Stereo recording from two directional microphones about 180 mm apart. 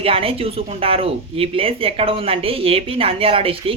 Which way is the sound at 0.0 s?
30° right (ahead or behind).